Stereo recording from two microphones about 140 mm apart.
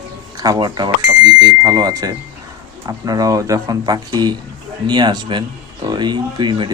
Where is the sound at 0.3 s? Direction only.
30° right (ahead or behind).